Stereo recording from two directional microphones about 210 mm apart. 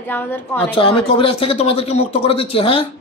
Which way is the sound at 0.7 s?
25° left (ahead or behind).